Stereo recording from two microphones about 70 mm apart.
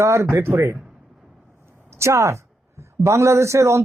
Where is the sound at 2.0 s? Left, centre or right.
Right.